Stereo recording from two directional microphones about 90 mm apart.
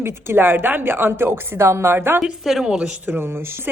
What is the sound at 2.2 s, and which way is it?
Speech, centre (ahead or behind).